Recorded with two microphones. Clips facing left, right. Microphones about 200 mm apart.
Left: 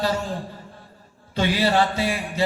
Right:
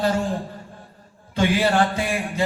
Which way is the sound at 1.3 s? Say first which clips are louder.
Right 1 dB; 50° right (ahead or behind).